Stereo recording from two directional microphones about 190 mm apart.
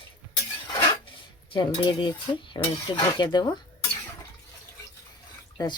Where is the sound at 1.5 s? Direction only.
25° left (ahead or behind).